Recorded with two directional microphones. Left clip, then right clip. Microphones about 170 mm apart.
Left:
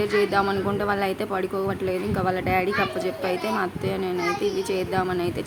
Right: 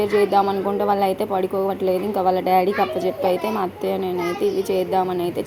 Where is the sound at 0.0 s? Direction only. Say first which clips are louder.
Right 4 dB; 5° right (ahead or behind).